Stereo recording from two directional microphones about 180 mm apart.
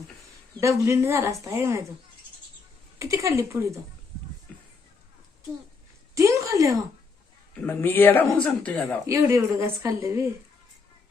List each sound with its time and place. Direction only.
0.6 s speech: 15° right (ahead or behind)
3.0 s speech: 15° right (ahead or behind)
6.1 s a woman's voice: 15° right (ahead or behind)
7.6 s speech: 10° left (ahead or behind)
9.0 s speech: 15° right (ahead or behind)